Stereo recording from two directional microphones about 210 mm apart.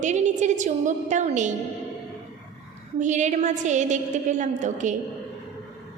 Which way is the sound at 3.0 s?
35° right (ahead or behind).